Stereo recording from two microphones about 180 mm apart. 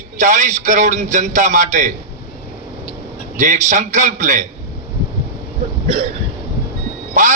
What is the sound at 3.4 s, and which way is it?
A man's voice, 45° right (ahead or behind).